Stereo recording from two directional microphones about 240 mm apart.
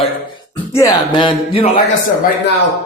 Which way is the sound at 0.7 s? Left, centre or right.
Centre.